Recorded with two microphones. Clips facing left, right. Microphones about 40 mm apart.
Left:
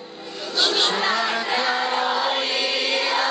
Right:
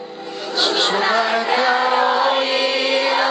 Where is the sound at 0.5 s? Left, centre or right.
Centre.